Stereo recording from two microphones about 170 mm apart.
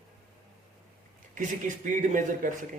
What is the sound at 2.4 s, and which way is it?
Speech, 55° right (ahead or behind).